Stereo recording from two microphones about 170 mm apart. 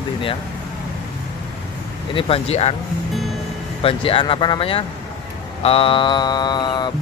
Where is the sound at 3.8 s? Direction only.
35° left (ahead or behind).